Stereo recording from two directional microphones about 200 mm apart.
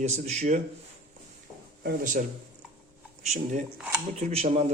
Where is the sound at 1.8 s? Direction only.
45° right (ahead or behind).